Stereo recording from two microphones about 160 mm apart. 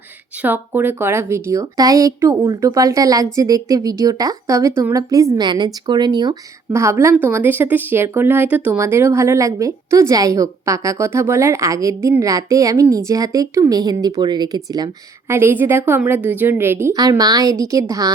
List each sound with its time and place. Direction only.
0.4 s a woman's voice: 10° right (ahead or behind)